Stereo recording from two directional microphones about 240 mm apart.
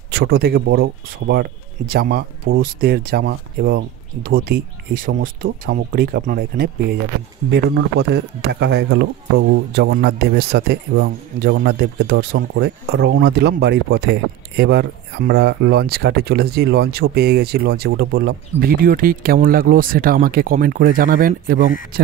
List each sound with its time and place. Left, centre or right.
0.1 s a man's voice: right